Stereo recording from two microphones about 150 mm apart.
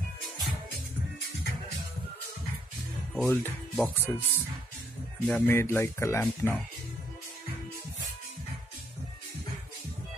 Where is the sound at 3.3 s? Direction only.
15° left (ahead or behind).